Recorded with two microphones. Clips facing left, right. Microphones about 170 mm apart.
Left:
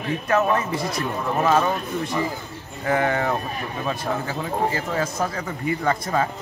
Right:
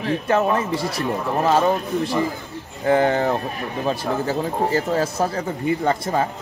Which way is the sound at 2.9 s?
30° right (ahead or behind).